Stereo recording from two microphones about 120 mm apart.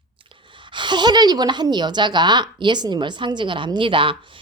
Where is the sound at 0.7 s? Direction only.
40° right (ahead or behind).